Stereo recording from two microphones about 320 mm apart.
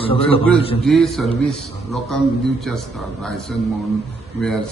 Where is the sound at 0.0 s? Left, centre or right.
Centre.